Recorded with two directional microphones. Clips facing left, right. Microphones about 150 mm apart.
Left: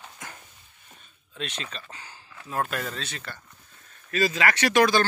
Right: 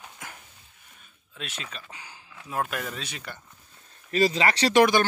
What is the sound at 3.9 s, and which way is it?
Speech, 30° right (ahead or behind).